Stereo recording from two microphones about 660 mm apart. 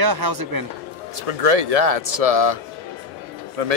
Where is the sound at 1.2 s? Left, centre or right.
Right.